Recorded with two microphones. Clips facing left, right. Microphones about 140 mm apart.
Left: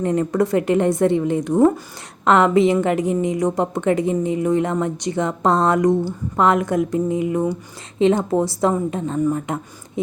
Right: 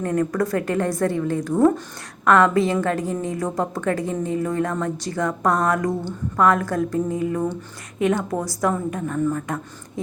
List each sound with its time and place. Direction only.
0.0 s a woman's voice: 20° left (ahead or behind)
7.9 s a woman's voice: 25° left (ahead or behind)